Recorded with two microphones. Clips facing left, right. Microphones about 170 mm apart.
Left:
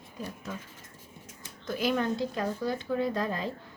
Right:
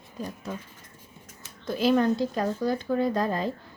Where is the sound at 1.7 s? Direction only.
30° right (ahead or behind).